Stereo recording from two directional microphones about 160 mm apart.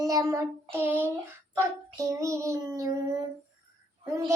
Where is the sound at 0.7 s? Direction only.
15° right (ahead or behind).